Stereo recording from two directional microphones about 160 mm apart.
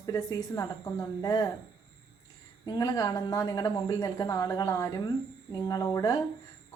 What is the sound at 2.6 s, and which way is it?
A woman's voice, 20° left (ahead or behind).